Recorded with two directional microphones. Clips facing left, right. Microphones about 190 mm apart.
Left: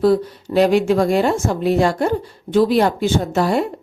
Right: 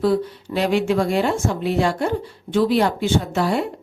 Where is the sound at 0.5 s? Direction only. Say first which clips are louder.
Left 5 dB; 45° left (ahead or behind).